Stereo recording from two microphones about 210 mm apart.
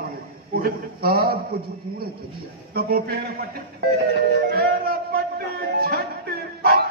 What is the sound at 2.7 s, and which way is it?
A man's voice, 45° right (ahead or behind).